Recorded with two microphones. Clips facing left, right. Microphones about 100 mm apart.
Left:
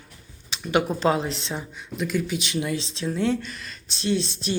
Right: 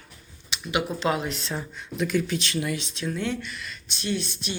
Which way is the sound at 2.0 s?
Centre (ahead or behind).